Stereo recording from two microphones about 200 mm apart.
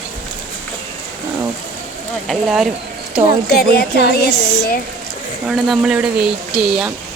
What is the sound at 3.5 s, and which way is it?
A woman's voice, 50° left (ahead or behind).